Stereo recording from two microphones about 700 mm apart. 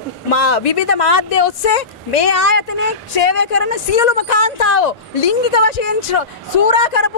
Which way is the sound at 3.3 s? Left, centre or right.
Left.